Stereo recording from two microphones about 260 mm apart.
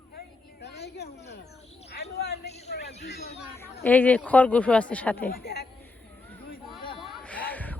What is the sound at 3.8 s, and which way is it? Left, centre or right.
Speech, centre.